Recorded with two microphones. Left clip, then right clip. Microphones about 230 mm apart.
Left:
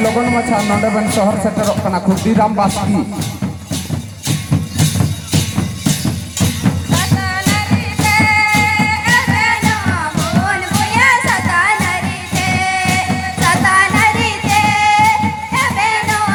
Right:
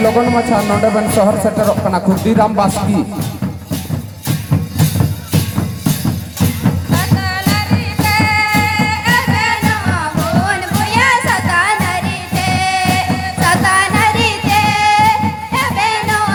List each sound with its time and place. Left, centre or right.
0.0 s music: right
7.0 s music: right